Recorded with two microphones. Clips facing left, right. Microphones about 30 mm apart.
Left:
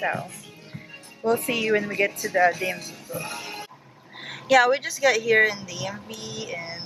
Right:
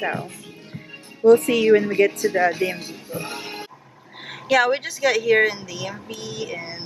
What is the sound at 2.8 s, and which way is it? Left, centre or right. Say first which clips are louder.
Speech: right 2 dB; right.